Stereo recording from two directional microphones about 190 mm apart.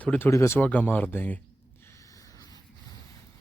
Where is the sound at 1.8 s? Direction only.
15° left (ahead or behind).